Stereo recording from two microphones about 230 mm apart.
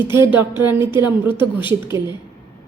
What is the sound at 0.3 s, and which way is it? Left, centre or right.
A woman's voice, centre.